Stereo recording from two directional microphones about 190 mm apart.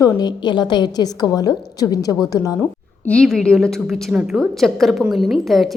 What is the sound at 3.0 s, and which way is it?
A woman's voice, 5° left (ahead or behind).